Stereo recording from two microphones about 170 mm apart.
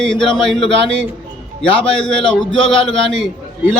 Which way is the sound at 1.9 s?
5° left (ahead or behind).